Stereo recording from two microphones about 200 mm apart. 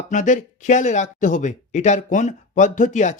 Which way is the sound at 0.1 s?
40° left (ahead or behind).